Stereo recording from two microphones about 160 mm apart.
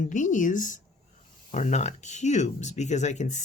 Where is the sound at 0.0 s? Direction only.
50° left (ahead or behind).